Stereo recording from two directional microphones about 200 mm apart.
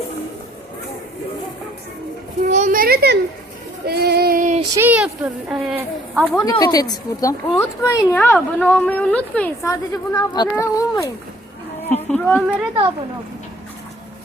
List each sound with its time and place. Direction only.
2.4 s a sound: 35° right (ahead or behind)
3.8 s female singing: 50° right (ahead or behind)
4.7 s a woman's voice: 10° right (ahead or behind)
6.3 s speech: 20° left (ahead or behind)